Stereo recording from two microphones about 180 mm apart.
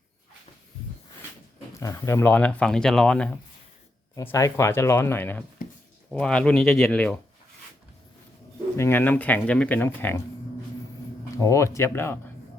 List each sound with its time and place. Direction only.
1.8 s speech: 15° left (ahead or behind)
4.1 s speech: 15° left (ahead or behind)
8.7 s speech: 15° left (ahead or behind)
11.3 s speech: 15° left (ahead or behind)